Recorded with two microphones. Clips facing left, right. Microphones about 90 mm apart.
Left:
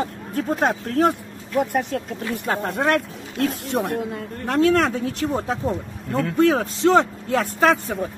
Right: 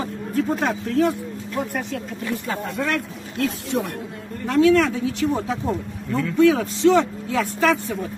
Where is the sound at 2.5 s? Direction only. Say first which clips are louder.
Left 6 dB; 55° left (ahead or behind).